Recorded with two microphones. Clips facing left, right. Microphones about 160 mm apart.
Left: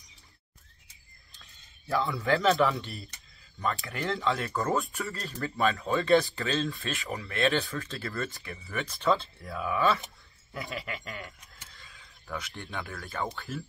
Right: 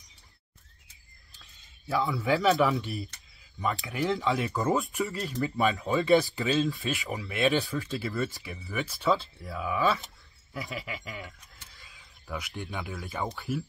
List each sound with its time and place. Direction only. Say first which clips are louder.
1.4 s speech: right 3 dB; centre (ahead or behind)
10.5 s keys jangling: even; centre (ahead or behind)
12.5 s speech: right 2 dB; 15° right (ahead or behind)
13.3 s speech: right 5 dB; 20° right (ahead or behind)